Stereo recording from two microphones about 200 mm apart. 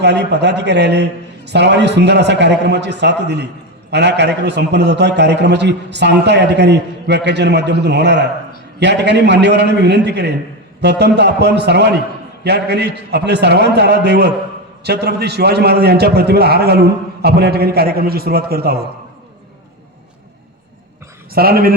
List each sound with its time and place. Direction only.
0.0 s a man's voice: 55° right (ahead or behind)
21.3 s a man's voice: 50° right (ahead or behind)